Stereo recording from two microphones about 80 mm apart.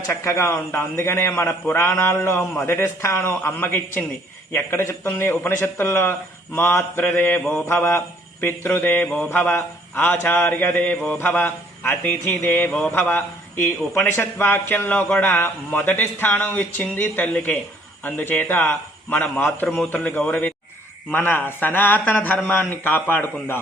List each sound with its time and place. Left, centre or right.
0.1 s a man's voice: left